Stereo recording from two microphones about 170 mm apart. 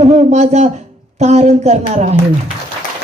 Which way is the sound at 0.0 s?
40° right (ahead or behind).